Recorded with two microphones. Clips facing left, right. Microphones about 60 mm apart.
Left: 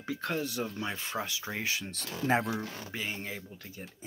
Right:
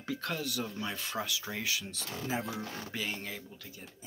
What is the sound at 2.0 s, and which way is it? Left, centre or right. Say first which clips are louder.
Speech: left 7 dB; left.